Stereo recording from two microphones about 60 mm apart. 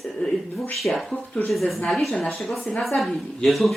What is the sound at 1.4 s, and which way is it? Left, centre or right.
Speech, centre.